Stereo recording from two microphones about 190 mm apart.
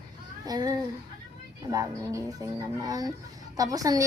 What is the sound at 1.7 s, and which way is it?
A woman's voice, 20° right (ahead or behind).